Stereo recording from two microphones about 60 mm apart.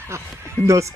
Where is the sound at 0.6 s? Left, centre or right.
Centre.